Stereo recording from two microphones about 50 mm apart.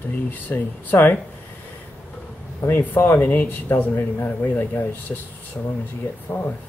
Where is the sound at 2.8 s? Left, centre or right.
Left.